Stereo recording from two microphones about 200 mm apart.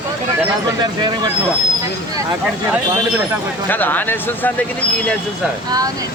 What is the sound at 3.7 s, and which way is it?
Speech, 10° left (ahead or behind).